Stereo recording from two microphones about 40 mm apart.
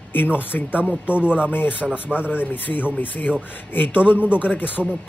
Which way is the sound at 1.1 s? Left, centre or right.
Right.